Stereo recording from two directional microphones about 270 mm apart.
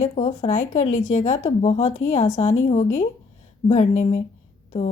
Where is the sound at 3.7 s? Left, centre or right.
Left.